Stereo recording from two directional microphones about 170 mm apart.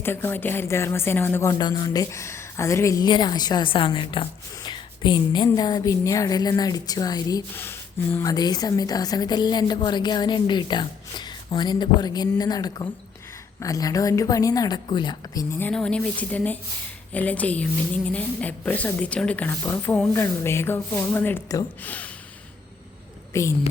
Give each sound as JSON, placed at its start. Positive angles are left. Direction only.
{"t": 0.0, "sound": "speech", "side_deg": 15}
{"t": 15.5, "sound": "a woman's voice", "side_deg": 10}
{"t": 23.3, "sound": "a woman's voice", "side_deg": 15}